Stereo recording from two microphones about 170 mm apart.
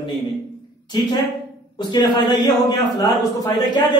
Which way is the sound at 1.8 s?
25° left (ahead or behind).